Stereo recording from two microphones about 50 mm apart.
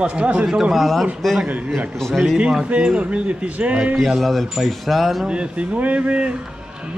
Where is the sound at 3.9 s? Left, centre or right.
Centre.